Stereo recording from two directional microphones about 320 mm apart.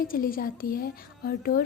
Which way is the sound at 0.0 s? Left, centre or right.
Left.